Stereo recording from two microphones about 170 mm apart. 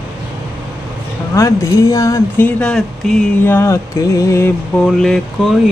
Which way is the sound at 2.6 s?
5° left (ahead or behind).